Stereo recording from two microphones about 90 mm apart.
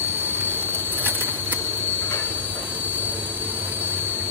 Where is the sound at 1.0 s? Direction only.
20° right (ahead or behind).